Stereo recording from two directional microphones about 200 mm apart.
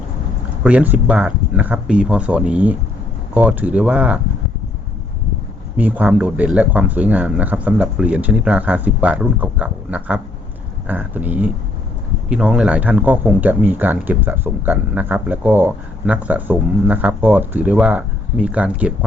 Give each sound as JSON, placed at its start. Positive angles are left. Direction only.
{"t": 0.6, "sound": "speech", "side_deg": -5}
{"t": 5.7, "sound": "speech", "side_deg": -10}